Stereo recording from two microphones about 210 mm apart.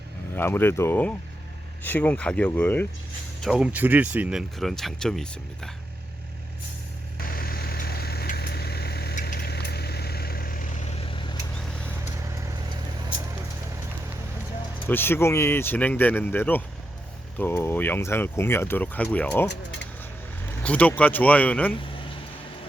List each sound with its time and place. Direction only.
0.3 s speech: 10° left (ahead or behind)
3.4 s speech: 5° right (ahead or behind)
7.3 s vehicle: 45° left (ahead or behind); by 11.3 s 25° left (ahead or behind)
12.3 s vehicle: 15° right (ahead or behind)
14.8 s speech: 10° left (ahead or behind)
20.7 s speech: 5° left (ahead or behind)